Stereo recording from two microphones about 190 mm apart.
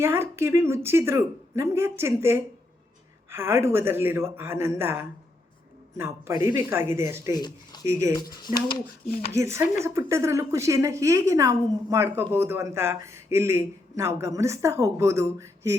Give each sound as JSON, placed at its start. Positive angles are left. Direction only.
{"t": 0.0, "sound": "a woman's voice", "side_deg": -15}
{"t": 7.3, "sound": "speech", "side_deg": 20}
{"t": 7.9, "sound": "a woman's voice", "side_deg": -15}
{"t": 8.5, "sound": "speech", "side_deg": 25}
{"t": 9.3, "sound": "a woman's voice", "side_deg": -15}